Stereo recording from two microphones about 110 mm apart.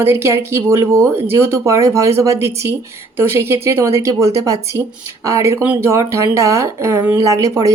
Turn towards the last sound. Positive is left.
turn(degrees=-30)  # may be behind; listen again after turning